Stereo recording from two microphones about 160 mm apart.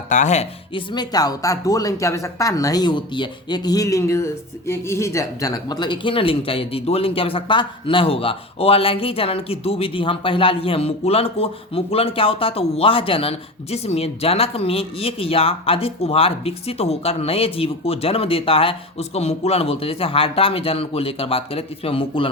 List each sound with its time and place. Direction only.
0.1 s speech: 50° left (ahead or behind)
0.7 s speech: 25° left (ahead or behind)